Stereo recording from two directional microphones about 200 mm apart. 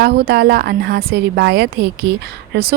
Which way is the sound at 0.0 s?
50° right (ahead or behind).